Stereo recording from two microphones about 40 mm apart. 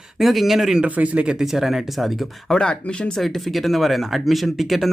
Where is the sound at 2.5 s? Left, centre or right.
Left.